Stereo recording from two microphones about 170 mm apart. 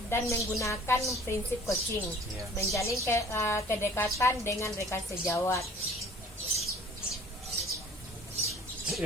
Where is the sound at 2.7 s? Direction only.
15° left (ahead or behind).